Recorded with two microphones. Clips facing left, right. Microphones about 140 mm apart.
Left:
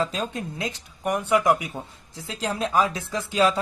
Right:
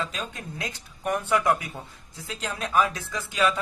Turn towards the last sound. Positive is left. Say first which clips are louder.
# left 4 dB
turn(degrees=30)  # may be behind; listen again after turning